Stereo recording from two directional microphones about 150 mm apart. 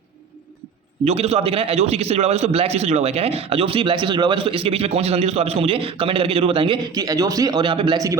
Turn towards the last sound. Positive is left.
turn(degrees=-35)  # may be behind; listen again after turning